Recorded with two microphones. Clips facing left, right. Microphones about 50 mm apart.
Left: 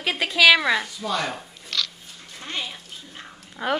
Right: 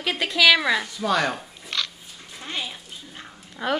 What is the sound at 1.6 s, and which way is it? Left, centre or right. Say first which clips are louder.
Dog: even; right.